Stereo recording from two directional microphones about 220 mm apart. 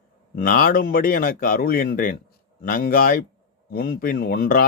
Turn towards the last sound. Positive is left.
turn(degrees=40)  # may be behind; listen again after turning